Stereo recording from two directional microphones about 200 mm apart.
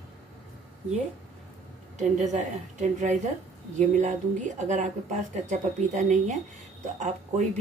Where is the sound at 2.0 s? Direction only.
35° right (ahead or behind).